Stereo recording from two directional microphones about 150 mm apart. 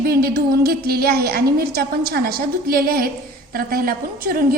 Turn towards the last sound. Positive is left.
turn(degrees=-80)